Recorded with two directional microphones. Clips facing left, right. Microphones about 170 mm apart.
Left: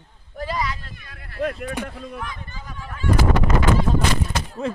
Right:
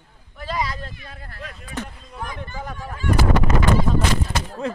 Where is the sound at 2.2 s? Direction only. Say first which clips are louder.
Right 4 dB; 50° right (ahead or behind).